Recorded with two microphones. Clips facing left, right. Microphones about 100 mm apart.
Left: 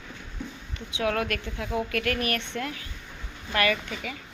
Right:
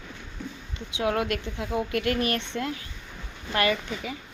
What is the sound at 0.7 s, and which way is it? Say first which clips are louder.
Speech: right 1 dB; 25° right (ahead or behind).